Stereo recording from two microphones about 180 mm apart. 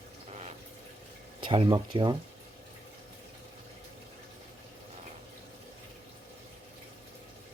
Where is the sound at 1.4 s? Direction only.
30° right (ahead or behind).